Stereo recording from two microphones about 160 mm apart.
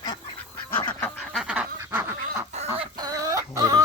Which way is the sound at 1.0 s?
Centre (ahead or behind).